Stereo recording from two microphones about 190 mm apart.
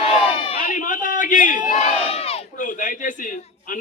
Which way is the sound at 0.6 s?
45° left (ahead or behind).